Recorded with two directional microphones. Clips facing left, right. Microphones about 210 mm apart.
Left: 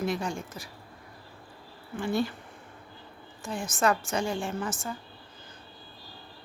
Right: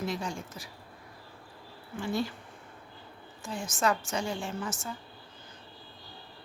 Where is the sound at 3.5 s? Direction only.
55° left (ahead or behind).